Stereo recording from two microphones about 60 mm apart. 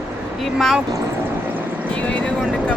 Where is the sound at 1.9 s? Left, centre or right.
Left.